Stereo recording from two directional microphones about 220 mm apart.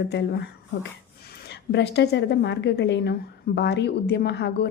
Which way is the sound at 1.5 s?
50° left (ahead or behind).